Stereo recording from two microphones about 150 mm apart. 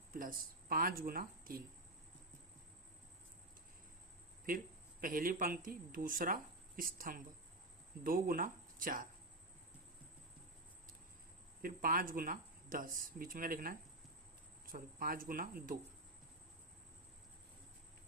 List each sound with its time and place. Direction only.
0.1 s speech: 70° right (ahead or behind)
4.4 s speech: 70° right (ahead or behind)
11.6 s speech: 70° right (ahead or behind)